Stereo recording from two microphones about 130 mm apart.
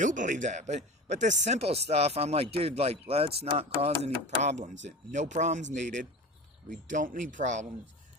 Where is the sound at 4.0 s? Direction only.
60° right (ahead or behind).